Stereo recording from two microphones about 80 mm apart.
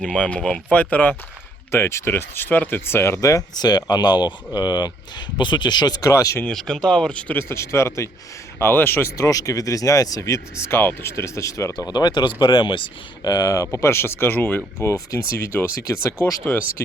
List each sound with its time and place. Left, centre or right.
0.0 s speech: centre
0.7 s speech: centre
1.7 s speech: left
3.2 s speech: left
6.1 s speech: left
6.5 s speech: centre
7.3 s speech: left
9.1 s speech: left
11.9 s speech: left
13.2 s speech: left
14.8 s speech: left
16.4 s speech: left